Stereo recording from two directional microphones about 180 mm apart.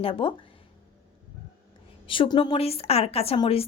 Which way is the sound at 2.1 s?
25° left (ahead or behind).